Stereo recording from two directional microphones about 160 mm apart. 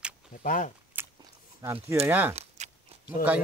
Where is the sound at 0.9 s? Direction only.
10° right (ahead or behind).